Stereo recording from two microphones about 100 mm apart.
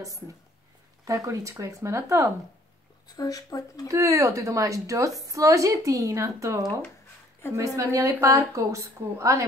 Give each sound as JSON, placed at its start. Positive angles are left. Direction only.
{"t": 1.0, "sound": "a woman's voice", "side_deg": -35}
{"t": 3.2, "sound": "speech", "side_deg": 35}
{"t": 3.8, "sound": "a woman's voice", "side_deg": -30}